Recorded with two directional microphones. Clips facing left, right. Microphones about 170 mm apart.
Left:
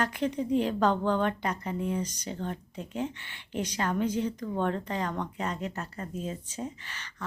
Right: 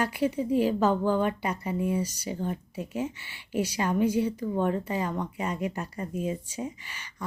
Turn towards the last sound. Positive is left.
turn(degrees=-10)  # may be behind; listen again after turning